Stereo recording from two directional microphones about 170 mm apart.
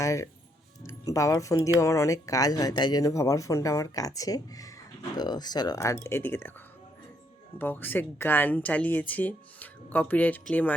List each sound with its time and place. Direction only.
0.0 s speech: 20° left (ahead or behind)
7.6 s speech: 10° left (ahead or behind)